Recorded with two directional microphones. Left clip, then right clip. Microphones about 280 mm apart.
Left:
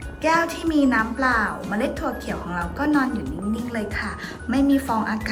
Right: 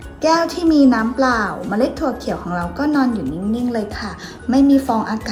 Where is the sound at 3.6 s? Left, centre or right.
Centre.